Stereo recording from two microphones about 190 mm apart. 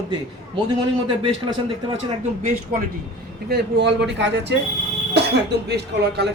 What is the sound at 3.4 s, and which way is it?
A man's voice, 60° right (ahead or behind).